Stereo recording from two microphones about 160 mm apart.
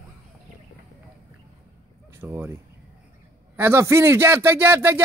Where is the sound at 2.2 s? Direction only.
15° right (ahead or behind).